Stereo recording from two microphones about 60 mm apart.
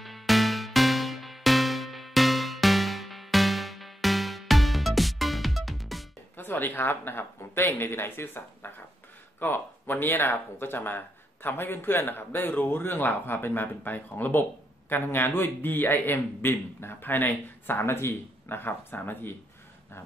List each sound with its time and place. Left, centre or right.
0.0 s music: centre
6.3 s speech: left